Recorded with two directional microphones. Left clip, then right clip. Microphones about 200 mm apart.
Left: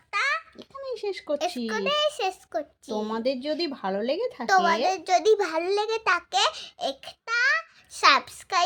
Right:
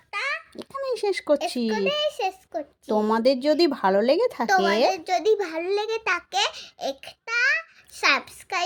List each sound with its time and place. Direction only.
0.1 s a sound: 15° left (ahead or behind)
0.5 s speech: 50° right (ahead or behind)
1.7 s a child's voice: 20° left (ahead or behind)
3.0 s speech: 45° right (ahead or behind)
4.4 s a child's voice: 10° left (ahead or behind)